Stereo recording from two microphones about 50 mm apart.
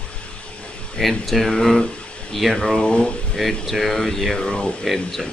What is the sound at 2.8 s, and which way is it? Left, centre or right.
Speech, centre.